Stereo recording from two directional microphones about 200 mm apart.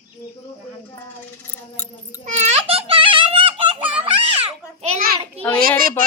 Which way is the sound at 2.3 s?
35° right (ahead or behind).